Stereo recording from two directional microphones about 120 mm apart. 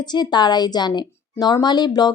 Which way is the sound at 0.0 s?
35° left (ahead or behind).